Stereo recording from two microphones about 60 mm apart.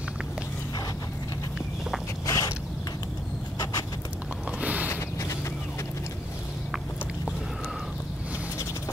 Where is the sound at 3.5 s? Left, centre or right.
Left.